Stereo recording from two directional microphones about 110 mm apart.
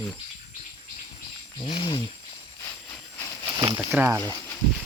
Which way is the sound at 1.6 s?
50° left (ahead or behind).